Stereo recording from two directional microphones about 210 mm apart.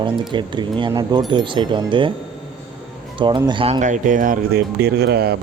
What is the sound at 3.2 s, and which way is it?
Speech, 20° right (ahead or behind).